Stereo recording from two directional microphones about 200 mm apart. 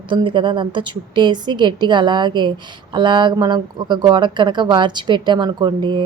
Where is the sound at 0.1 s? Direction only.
25° right (ahead or behind).